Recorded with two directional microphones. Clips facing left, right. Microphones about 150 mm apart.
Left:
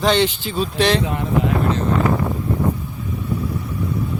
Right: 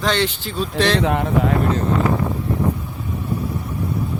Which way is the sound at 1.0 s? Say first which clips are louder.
Right 4 dB; 65° right (ahead or behind).